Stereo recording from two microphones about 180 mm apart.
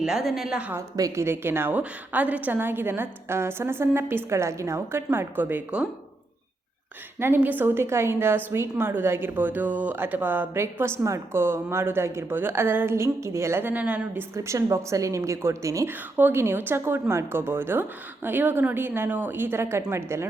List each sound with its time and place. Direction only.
0.0 s a woman's voice: centre (ahead or behind)
0.9 s a woman's voice: 15° right (ahead or behind)
7.2 s a woman's voice: 10° right (ahead or behind)